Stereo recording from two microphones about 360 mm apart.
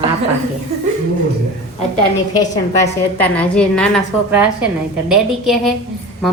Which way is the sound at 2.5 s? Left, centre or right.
Centre.